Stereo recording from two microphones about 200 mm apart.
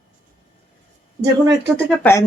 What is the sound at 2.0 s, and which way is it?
Speech, 15° left (ahead or behind).